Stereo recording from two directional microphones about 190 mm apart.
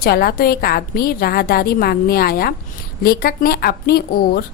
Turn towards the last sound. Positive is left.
turn(degrees=55)  # may be behind; listen again after turning